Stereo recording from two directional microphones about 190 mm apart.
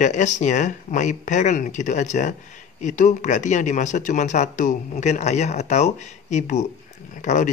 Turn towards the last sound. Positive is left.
turn(degrees=40)  # may be behind; listen again after turning